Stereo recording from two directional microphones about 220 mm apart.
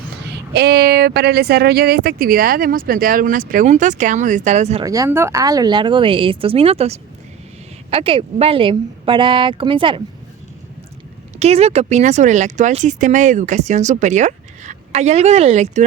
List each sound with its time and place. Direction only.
0.5 s speech: 50° right (ahead or behind); by 4.8 s 30° right (ahead or behind)
4.8 s speech: 15° right (ahead or behind)
11.3 s speech: 30° right (ahead or behind)